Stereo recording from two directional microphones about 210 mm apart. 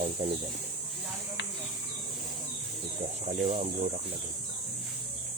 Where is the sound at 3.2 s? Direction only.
30° right (ahead or behind).